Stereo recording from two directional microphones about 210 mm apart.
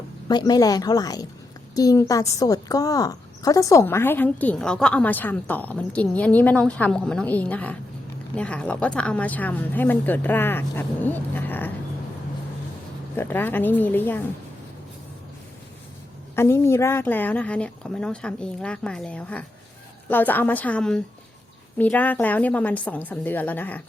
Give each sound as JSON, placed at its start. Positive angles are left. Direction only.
{"t": 0.3, "sound": "a woman's voice", "side_deg": 20}
{"t": 13.1, "sound": "a woman's voice", "side_deg": 10}
{"t": 16.3, "sound": "a woman's voice", "side_deg": 10}